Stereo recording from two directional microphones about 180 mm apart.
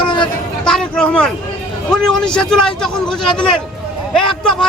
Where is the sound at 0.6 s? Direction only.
5° left (ahead or behind).